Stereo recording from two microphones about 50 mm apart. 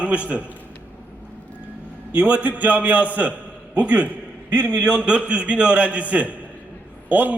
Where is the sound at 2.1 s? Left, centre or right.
Right.